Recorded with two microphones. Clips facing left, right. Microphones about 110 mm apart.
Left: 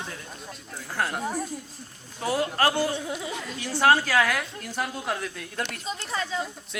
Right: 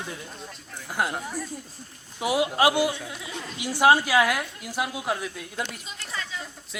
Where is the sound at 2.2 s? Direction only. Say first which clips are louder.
Right 2 dB; 10° right (ahead or behind).